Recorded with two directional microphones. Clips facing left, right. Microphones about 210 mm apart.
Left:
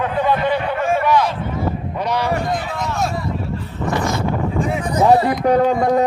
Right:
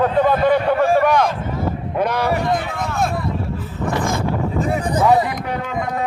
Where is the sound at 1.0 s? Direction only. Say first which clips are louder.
Right 1 dB; 50° right (ahead or behind).